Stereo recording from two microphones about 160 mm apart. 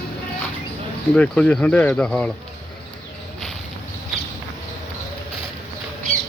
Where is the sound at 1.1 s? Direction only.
5° left (ahead or behind).